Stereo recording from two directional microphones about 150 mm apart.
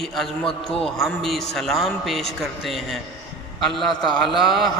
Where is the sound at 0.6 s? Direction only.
Centre (ahead or behind).